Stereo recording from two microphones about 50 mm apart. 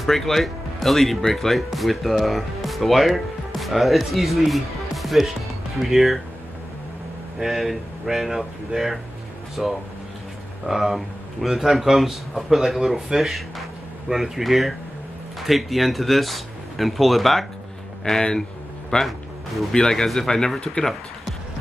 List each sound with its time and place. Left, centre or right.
0.0 s speech: centre
7.3 s speech: centre
18.0 s speech: centre